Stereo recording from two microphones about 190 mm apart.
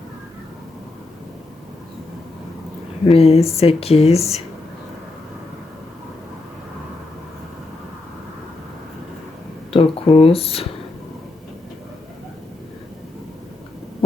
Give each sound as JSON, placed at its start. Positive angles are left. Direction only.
{"t": 3.1, "sound": "speech", "side_deg": 30}
{"t": 9.7, "sound": "speech", "side_deg": 30}